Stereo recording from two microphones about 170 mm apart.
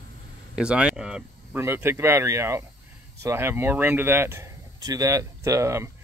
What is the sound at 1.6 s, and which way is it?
Speech, 15° right (ahead or behind).